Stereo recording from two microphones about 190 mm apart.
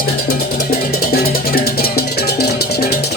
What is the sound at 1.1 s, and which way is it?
Music, 55° left (ahead or behind).